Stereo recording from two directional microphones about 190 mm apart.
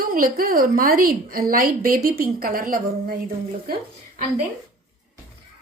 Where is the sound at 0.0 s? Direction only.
50° right (ahead or behind).